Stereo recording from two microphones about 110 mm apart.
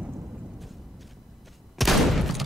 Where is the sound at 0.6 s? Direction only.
Centre (ahead or behind).